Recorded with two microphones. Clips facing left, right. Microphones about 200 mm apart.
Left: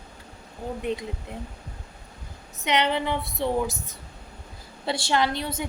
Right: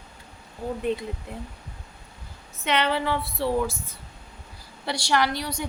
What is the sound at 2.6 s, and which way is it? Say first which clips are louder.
Speech: even; 20° left (ahead or behind).